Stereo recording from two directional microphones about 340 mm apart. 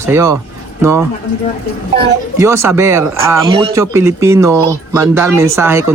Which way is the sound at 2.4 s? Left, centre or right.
Centre.